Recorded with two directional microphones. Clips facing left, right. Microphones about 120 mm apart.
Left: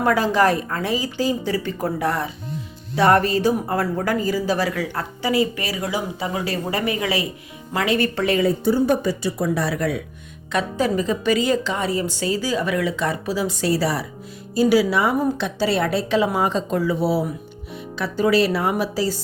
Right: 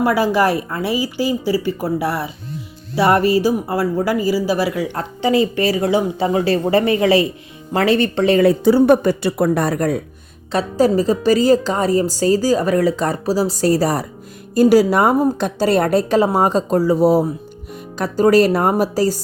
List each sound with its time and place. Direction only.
0.0 s a woman's voice: 10° right (ahead or behind)
4.7 s speech: 25° right (ahead or behind)
8.4 s a woman's voice: 80° right
9.0 s a woman's voice: 60° right (ahead or behind); by 19.2 s 45° right (ahead or behind)